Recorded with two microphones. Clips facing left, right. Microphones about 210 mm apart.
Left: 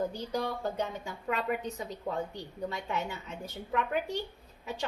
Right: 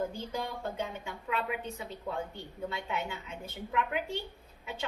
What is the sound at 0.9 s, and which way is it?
A woman's voice, 40° left (ahead or behind).